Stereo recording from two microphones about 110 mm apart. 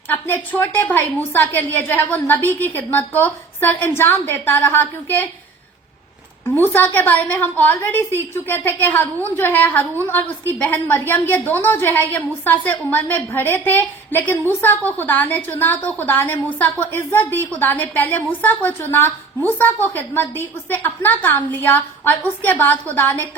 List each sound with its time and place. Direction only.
0.3 s a woman's voice: 20° left (ahead or behind)
6.5 s a woman's voice: 20° left (ahead or behind)